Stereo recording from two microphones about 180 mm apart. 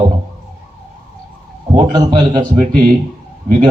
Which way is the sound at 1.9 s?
25° right (ahead or behind).